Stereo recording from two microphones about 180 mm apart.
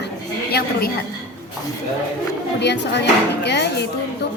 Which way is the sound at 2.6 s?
70° left (ahead or behind).